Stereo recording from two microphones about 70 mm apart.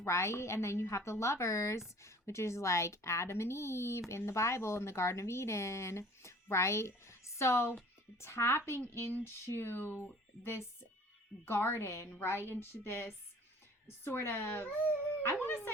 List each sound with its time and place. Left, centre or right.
0.0 s speech: left
11.4 s speech: left